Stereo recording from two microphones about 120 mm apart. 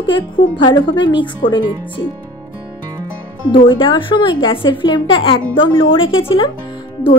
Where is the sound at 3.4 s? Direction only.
40° left (ahead or behind).